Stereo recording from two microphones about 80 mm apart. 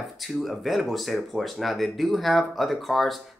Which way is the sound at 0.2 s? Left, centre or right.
Centre.